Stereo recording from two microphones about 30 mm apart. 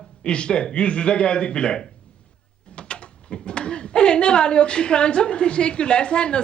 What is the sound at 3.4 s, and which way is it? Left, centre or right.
A woman's voice, left.